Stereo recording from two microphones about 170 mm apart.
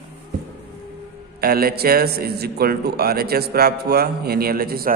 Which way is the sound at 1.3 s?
65° right (ahead or behind).